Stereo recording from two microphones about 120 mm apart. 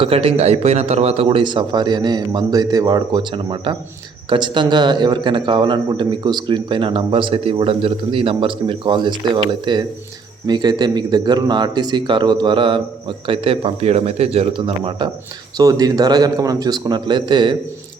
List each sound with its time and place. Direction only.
0.0 s speech: 55° right (ahead or behind)
15.5 s speech: 30° right (ahead or behind)